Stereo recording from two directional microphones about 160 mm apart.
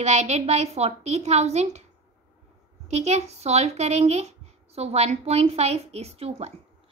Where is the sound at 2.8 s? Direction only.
45° right (ahead or behind).